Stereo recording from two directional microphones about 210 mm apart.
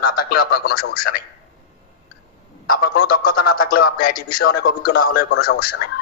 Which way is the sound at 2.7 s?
45° left (ahead or behind).